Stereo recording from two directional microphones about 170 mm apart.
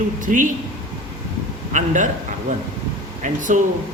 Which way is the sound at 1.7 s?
45° right (ahead or behind).